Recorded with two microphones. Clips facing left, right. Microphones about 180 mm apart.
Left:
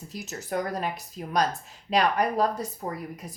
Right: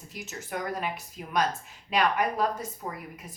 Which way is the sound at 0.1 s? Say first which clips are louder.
Left 4 dB; 40° left (ahead or behind).